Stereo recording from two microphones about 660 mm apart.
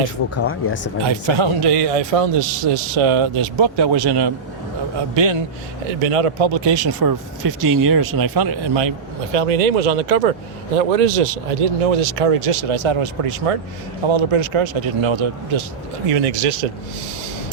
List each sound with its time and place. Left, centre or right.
1.0 s a man's voice: right
6.0 s speech: right
9.3 s speech: right
10.8 s a man's voice: right
16.1 s speech: right